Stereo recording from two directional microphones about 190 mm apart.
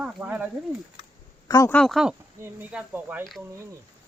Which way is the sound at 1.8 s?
Centre (ahead or behind).